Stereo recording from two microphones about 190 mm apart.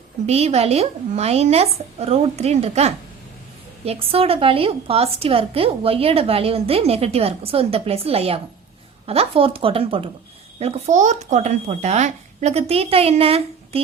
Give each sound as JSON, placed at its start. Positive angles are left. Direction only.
{"t": 0.3, "sound": "a woman's voice", "side_deg": -35}